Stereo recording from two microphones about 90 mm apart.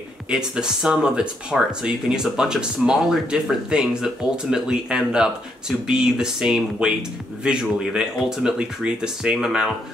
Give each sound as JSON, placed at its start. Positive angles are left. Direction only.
{"t": 0.3, "sound": "speech", "side_deg": -10}